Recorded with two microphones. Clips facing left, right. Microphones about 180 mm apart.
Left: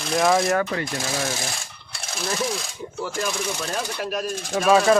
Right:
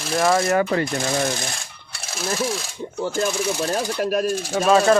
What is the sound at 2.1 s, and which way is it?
Speech, centre (ahead or behind).